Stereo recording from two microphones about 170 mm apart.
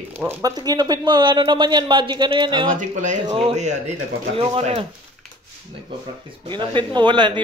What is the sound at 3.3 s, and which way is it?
Speech, 35° right (ahead or behind).